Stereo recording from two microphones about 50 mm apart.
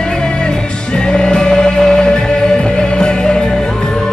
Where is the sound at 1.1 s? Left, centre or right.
Centre.